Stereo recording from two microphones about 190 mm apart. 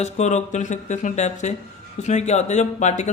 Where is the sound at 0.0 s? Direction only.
35° left (ahead or behind).